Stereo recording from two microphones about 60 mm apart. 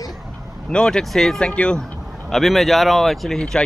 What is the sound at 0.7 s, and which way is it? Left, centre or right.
Speech, centre.